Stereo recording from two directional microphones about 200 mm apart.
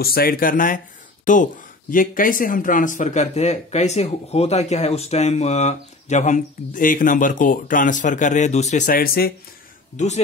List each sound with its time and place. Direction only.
0.0 s speech: 50° left (ahead or behind)
9.9 s speech: 35° left (ahead or behind)